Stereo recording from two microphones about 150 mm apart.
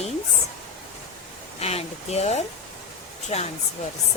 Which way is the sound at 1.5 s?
45° left (ahead or behind).